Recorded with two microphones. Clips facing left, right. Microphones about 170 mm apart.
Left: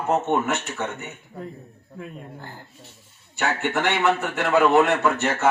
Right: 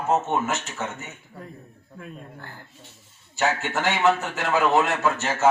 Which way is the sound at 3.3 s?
60° left (ahead or behind).